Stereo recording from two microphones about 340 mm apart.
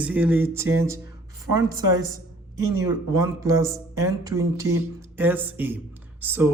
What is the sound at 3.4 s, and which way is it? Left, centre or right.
Speech, centre.